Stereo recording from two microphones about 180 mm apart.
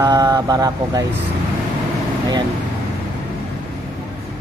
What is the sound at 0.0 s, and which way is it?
Speech, 15° right (ahead or behind).